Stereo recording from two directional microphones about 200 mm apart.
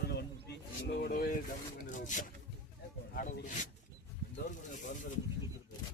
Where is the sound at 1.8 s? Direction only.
40° left (ahead or behind).